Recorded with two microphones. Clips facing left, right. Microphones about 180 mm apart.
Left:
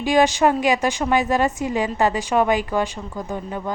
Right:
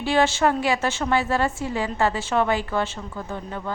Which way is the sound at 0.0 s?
15° left (ahead or behind).